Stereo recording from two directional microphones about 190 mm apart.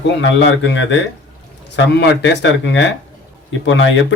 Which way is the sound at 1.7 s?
60° left (ahead or behind).